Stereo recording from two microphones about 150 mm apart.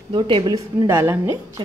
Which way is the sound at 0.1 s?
30° right (ahead or behind).